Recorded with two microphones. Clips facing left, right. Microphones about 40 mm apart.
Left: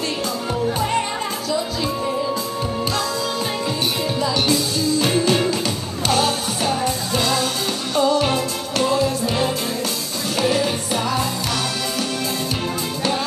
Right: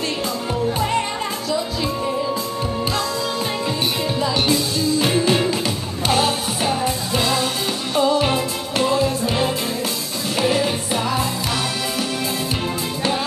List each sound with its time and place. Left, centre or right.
0.7 s music: centre
4.2 s music: centre